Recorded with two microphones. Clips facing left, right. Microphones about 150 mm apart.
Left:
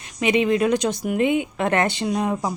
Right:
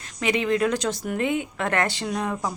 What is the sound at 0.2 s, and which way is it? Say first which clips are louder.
Speech: left 3 dB; 20° left (ahead or behind).